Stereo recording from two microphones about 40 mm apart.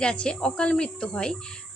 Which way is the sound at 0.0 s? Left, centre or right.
Left.